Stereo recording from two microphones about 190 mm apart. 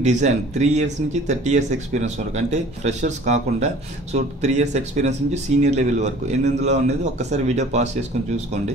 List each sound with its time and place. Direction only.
0.0 s speech: 35° right (ahead or behind)